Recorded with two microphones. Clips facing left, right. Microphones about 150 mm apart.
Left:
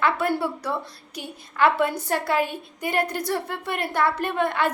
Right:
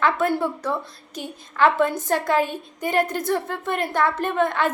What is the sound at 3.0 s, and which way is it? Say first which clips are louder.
Speech: right 1 dB; 50° right (ahead or behind).